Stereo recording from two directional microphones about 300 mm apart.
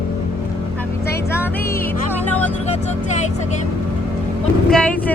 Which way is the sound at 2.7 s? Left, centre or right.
Left.